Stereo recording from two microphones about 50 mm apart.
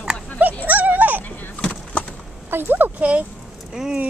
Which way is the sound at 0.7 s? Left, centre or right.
Right.